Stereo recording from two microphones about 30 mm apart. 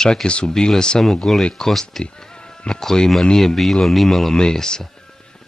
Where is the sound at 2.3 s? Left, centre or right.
Left.